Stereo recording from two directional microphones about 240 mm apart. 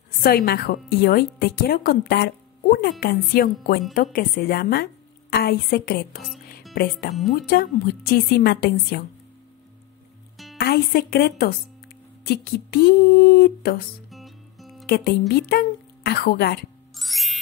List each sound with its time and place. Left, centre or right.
0.2 s a woman's voice: left
10.3 s music: centre
10.6 s a woman's voice: left
14.1 s music: centre
14.9 s a woman's voice: left
16.9 s music: centre